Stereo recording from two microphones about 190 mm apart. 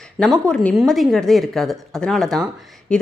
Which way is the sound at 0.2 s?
5° left (ahead or behind).